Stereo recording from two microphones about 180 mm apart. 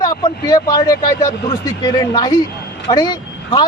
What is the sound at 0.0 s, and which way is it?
Speech, 20° left (ahead or behind).